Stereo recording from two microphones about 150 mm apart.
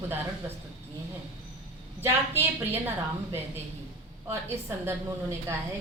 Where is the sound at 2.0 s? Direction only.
15° right (ahead or behind).